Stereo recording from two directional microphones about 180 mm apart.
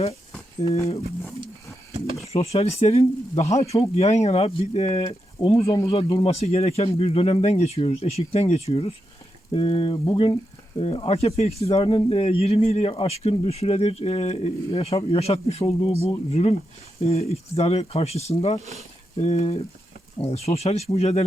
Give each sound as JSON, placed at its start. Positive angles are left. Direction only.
{"t": 0.6, "sound": "speech", "side_deg": 35}
{"t": 2.3, "sound": "speech", "side_deg": 35}
{"t": 5.0, "sound": "speech", "side_deg": 25}
{"t": 5.9, "sound": "speech", "side_deg": 30}